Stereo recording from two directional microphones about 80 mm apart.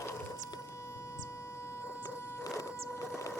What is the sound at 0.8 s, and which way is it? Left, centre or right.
Vehicle, left.